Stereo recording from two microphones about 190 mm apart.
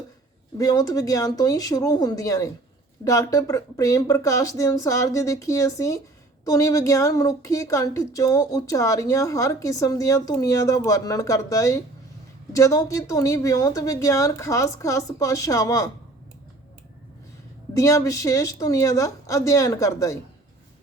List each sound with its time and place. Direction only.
0.5 s a woman's voice: 20° left (ahead or behind)
17.7 s a woman's voice: 15° left (ahead or behind)